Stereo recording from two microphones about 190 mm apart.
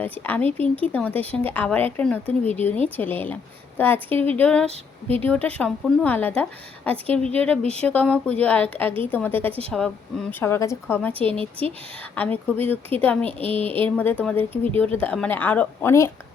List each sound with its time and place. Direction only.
0.0 s a woman's voice: 10° left (ahead or behind)
10.4 s a woman's voice: 15° left (ahead or behind)
11.2 s a woman's voice: 30° right (ahead or behind)
12.1 s a woman's voice: 10° left (ahead or behind)
13.2 s a woman's voice: 30° right (ahead or behind)
13.6 s a woman's voice: 10° left (ahead or behind)